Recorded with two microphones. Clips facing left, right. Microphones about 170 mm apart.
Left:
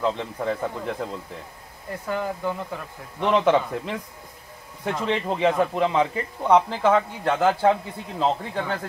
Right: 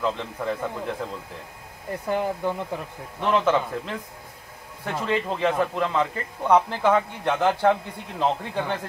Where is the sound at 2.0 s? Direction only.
20° right (ahead or behind).